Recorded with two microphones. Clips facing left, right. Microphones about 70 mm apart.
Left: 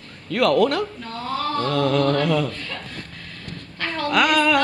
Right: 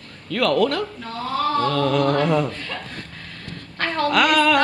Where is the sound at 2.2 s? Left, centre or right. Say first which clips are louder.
Right 1 dB; right.